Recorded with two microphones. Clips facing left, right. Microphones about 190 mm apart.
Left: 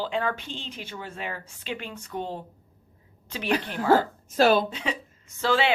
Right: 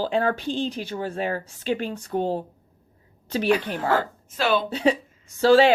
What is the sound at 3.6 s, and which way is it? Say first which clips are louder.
Speech: right 2 dB; 40° right (ahead or behind).